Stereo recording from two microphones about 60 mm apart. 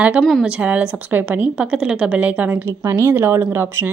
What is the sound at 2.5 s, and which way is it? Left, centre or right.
Speech, right.